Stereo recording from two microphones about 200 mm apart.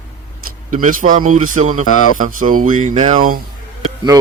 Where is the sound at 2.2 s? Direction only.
40° right (ahead or behind).